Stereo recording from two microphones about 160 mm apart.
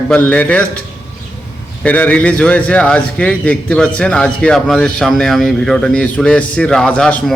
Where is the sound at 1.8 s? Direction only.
10° left (ahead or behind).